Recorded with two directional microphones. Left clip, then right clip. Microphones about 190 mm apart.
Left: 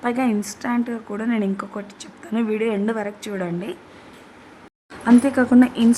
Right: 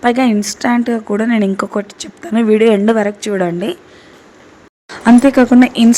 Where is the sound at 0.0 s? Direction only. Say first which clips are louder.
Right 9 dB; 15° right (ahead or behind).